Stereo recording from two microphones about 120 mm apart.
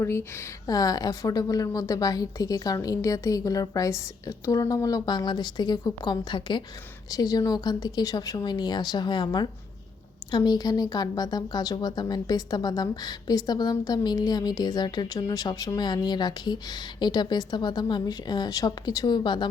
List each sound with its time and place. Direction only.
0.0 s a woman's voice: 20° left (ahead or behind); by 19.5 s 40° left (ahead or behind)